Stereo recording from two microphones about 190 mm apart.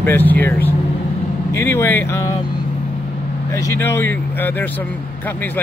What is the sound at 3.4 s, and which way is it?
Speech, 15° left (ahead or behind).